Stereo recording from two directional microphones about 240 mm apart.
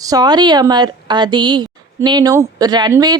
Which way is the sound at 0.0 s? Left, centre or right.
Centre.